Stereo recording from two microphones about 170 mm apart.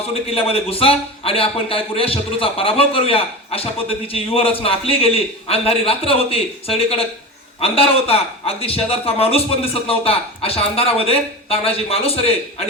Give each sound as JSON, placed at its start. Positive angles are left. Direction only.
{"t": 0.1, "sound": "a man's voice", "side_deg": 35}